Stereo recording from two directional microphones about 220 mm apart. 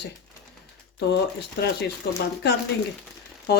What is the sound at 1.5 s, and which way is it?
Speech, 45° left (ahead or behind).